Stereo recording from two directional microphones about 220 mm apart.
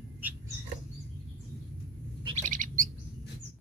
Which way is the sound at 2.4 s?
35° right (ahead or behind).